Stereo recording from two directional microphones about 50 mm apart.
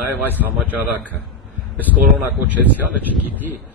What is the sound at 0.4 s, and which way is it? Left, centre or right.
Speech, right.